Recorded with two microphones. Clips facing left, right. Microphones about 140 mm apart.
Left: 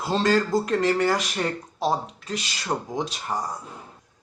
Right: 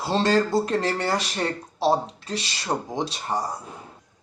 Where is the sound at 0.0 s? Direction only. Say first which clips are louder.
Right 1 dB; 30° right (ahead or behind).